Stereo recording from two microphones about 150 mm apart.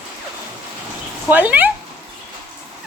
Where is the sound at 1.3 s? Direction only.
10° right (ahead or behind).